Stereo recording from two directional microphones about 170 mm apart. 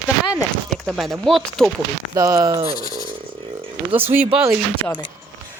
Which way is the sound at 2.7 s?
20° left (ahead or behind).